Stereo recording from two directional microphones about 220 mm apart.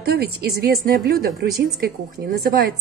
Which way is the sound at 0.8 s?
45° right (ahead or behind).